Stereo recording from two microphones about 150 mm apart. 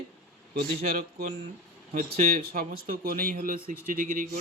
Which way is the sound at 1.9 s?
75° right (ahead or behind).